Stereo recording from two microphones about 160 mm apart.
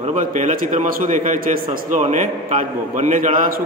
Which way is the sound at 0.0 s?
50° right (ahead or behind).